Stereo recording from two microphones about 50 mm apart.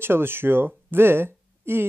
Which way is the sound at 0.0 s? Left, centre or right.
Right.